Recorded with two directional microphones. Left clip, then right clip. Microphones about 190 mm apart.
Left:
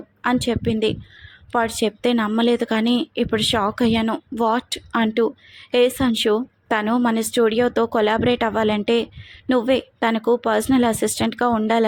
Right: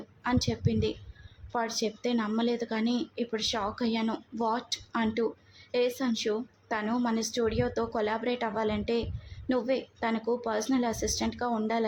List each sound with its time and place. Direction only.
0.2 s speech: 30° left (ahead or behind)